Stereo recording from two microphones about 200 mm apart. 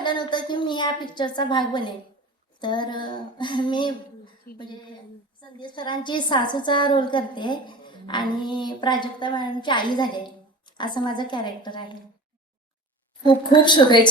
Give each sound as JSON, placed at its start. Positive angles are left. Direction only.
{"t": 0.0, "sound": "a woman's voice", "side_deg": 25}
{"t": 13.2, "sound": "a woman's voice", "side_deg": 25}